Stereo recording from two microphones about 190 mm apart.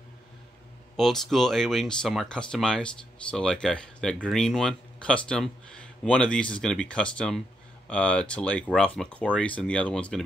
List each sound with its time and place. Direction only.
0.9 s speech: centre (ahead or behind)